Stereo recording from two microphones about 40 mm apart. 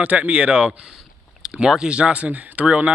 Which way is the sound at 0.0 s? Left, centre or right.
Right.